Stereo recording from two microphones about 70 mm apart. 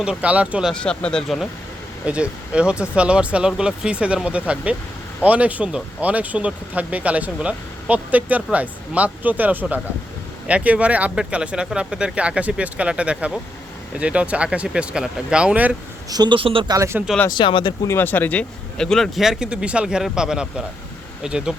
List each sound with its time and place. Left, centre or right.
0.0 s speech: centre
0.7 s speech: centre
2.0 s speech: centre
16.0 s a man's voice: right
16.7 s speech: right
17.2 s speech: left
17.8 s speech: left
18.8 s speech: centre
19.1 s speech: centre